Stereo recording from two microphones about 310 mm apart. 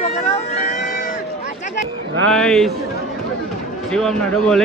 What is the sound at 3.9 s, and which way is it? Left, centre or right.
Speech, centre.